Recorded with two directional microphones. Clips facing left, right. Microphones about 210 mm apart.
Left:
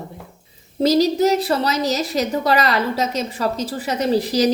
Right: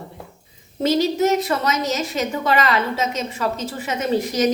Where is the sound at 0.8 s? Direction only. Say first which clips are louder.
Left 3 dB; 35° left (ahead or behind).